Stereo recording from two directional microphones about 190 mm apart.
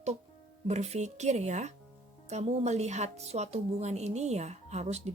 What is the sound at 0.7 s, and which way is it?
Speech, 35° right (ahead or behind).